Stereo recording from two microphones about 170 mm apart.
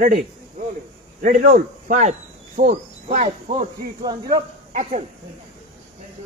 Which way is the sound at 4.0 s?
25° right (ahead or behind).